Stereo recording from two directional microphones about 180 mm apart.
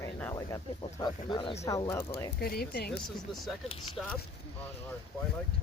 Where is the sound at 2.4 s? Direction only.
60° left (ahead or behind).